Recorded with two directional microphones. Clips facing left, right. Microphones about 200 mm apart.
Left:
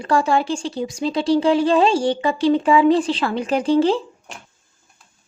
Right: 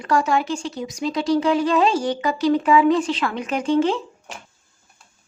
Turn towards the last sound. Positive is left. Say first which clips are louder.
# left 3 dB
turn(degrees=30)  # may be behind; listen again after turning